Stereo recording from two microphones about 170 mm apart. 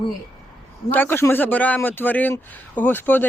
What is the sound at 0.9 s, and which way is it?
A man's voice, 15° left (ahead or behind).